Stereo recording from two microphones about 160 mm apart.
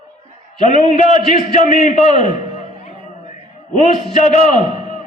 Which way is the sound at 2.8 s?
50° left (ahead or behind).